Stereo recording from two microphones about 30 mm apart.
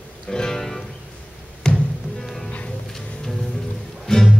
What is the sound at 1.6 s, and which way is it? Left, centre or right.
Music, left.